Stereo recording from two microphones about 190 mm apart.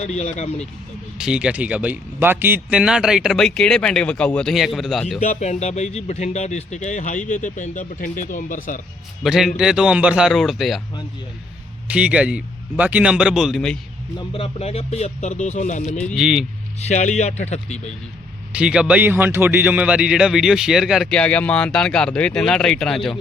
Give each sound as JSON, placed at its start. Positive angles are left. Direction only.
{"t": 0.0, "sound": "speech", "side_deg": 35}
{"t": 1.2, "sound": "a man's voice", "side_deg": -5}
{"t": 5.2, "sound": "speech", "side_deg": 35}
{"t": 9.2, "sound": "a man's voice", "side_deg": 0}
{"t": 11.9, "sound": "a man's voice", "side_deg": -5}
{"t": 14.2, "sound": "speech", "side_deg": 30}
{"t": 16.1, "sound": "a man's voice", "side_deg": 0}
{"t": 16.9, "sound": "speech", "side_deg": 40}
{"t": 18.5, "sound": "a man's voice", "side_deg": -5}